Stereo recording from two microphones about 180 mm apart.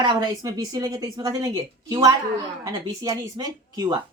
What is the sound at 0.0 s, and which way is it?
Speech, 20° right (ahead or behind).